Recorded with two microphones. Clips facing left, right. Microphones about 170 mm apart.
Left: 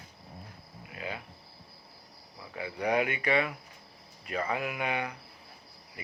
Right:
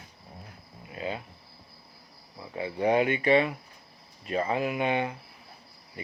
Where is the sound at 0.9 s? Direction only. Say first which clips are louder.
Right 5 dB; 30° right (ahead or behind).